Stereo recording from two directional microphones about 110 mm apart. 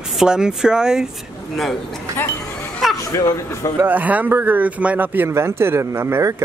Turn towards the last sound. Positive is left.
turn(degrees=-25)  # may be behind; listen again after turning